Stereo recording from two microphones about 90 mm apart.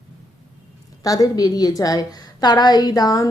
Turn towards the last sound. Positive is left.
turn(degrees=45)  # may be behind; listen again after turning